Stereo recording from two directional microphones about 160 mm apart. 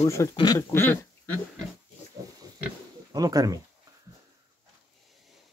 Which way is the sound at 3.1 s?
25° right (ahead or behind).